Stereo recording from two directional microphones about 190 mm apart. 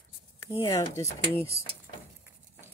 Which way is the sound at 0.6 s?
15° left (ahead or behind).